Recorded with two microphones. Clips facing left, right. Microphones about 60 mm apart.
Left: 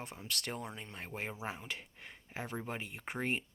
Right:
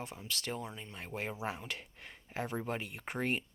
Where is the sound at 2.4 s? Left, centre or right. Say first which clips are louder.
Right 3 dB; centre.